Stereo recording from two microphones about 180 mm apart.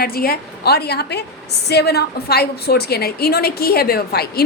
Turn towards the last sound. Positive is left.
turn(degrees=60)  # may be behind; listen again after turning